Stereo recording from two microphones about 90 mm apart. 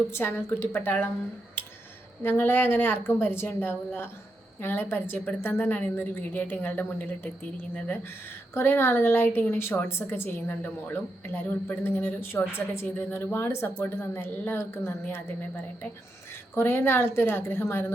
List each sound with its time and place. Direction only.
0.1 s a woman's voice: 25° left (ahead or behind)
2.2 s a woman's voice: 25° left (ahead or behind)
8.5 s a woman's voice: 25° left (ahead or behind)
16.6 s a woman's voice: 25° left (ahead or behind)